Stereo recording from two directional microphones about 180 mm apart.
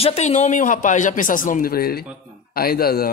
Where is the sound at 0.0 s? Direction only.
35° left (ahead or behind).